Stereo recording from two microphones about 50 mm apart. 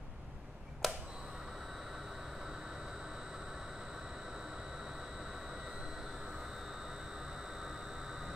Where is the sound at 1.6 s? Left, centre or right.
Centre.